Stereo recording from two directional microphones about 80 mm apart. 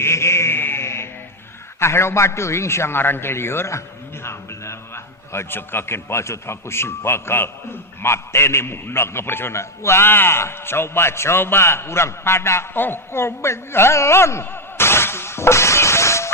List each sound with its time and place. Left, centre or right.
0.0 s sheep: left
1.8 s a man's voice: left